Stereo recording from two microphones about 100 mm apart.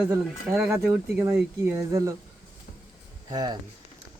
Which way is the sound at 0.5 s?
25° right (ahead or behind).